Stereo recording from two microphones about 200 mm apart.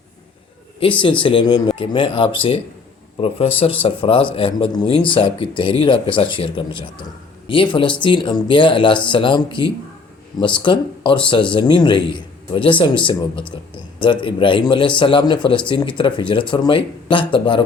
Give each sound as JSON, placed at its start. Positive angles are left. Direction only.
{"t": 0.8, "sound": "a man's voice", "side_deg": 25}